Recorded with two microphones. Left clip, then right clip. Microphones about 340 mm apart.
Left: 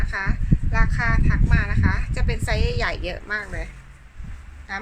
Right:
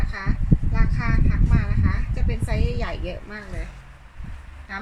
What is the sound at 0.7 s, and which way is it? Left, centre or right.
Speech, left.